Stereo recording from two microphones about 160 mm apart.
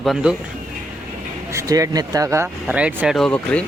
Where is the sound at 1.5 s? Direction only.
20° right (ahead or behind); by 3.6 s 5° left (ahead or behind).